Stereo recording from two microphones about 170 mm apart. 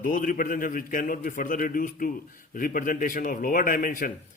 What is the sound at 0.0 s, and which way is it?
A man's voice, 55° left (ahead or behind).